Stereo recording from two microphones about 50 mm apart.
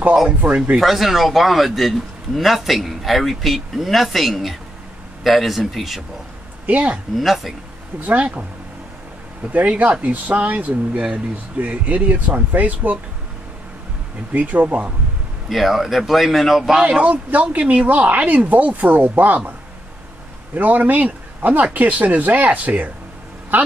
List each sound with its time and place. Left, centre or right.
0.4 s speech: centre
0.7 s a man's voice: centre
6.6 s speech: right
7.2 s a man's voice: centre
8.0 s speech: right
9.5 s speech: right
14.3 s speech: right
15.5 s a man's voice: centre
16.8 s speech: right
20.5 s a man's voice: right